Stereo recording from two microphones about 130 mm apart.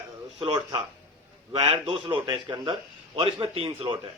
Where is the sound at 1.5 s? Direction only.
45° right (ahead or behind).